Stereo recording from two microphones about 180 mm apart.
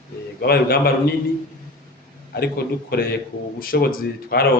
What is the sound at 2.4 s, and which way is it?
Speech, 60° left (ahead or behind).